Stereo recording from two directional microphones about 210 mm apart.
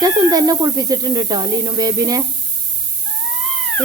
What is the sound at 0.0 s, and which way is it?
Speech, 20° right (ahead or behind).